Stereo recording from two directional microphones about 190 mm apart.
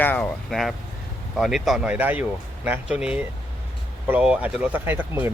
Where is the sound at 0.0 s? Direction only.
10° left (ahead or behind).